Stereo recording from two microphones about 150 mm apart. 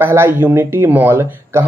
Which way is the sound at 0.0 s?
15° right (ahead or behind).